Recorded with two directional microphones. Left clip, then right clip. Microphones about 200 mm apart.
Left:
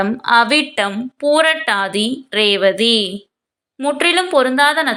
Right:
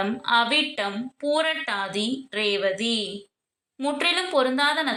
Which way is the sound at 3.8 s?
25° left (ahead or behind).